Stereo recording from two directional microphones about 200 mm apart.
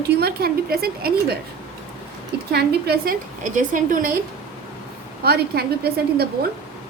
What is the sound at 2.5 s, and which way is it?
A woman's voice, 50° right (ahead or behind).